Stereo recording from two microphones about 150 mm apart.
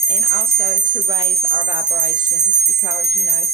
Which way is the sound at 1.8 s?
35° right (ahead or behind).